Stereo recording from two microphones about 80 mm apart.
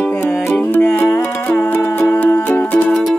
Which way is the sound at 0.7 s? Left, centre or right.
Left.